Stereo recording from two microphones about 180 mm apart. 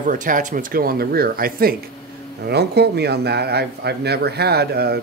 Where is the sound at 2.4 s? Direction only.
65° right (ahead or behind).